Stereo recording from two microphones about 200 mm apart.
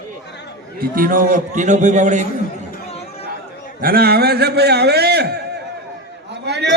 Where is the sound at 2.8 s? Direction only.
30° left (ahead or behind).